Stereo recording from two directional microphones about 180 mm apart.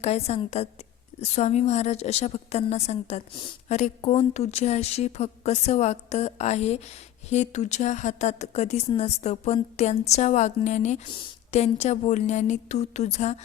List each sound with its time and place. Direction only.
0.0 s a woman's voice: 35° left (ahead or behind)